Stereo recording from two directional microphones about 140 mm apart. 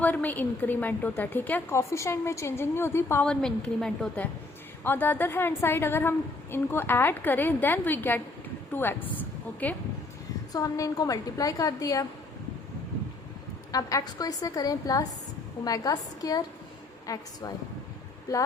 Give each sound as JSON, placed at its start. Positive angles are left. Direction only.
{"t": 0.0, "sound": "a woman's voice", "side_deg": 10}
{"t": 3.2, "sound": "a woman's voice", "side_deg": 5}
{"t": 10.5, "sound": "a woman's voice", "side_deg": 25}
{"t": 13.7, "sound": "a woman's voice", "side_deg": 25}